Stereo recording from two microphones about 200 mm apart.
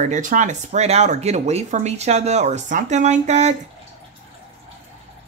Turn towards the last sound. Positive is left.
turn(degrees=-35)  # may be behind; listen again after turning